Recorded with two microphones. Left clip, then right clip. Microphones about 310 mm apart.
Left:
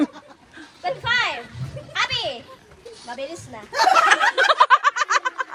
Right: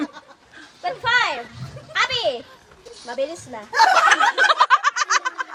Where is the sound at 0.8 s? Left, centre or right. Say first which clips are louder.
Right 2 dB; right.